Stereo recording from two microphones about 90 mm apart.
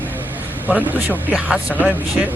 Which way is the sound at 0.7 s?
15° right (ahead or behind).